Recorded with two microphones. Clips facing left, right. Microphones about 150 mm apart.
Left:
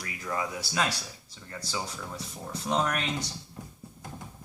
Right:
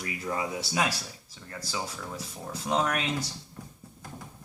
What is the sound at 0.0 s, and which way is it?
Speech, 20° right (ahead or behind).